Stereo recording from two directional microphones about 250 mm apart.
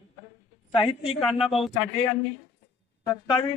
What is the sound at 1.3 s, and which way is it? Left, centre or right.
Speech, centre.